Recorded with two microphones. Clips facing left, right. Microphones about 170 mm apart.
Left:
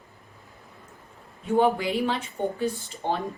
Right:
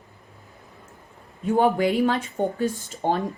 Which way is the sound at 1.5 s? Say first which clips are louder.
Right 2 dB; 45° right (ahead or behind).